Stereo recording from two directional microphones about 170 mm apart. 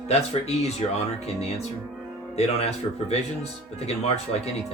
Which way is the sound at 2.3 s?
35° left (ahead or behind).